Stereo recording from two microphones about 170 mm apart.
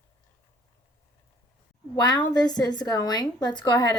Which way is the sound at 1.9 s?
25° left (ahead or behind).